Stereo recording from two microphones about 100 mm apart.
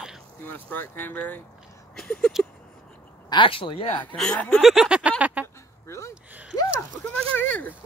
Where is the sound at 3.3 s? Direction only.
60° left (ahead or behind).